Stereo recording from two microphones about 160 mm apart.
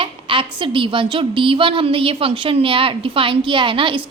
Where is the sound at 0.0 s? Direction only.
30° right (ahead or behind).